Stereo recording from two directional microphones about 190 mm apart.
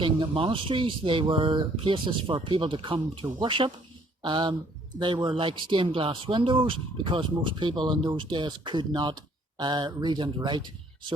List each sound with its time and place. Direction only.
0.0 s speech: 25° right (ahead or behind)